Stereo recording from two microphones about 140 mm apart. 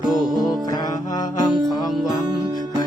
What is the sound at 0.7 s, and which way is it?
Music, 25° left (ahead or behind).